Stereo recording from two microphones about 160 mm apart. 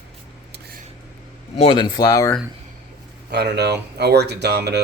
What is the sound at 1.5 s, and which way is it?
Speech, 35° left (ahead or behind).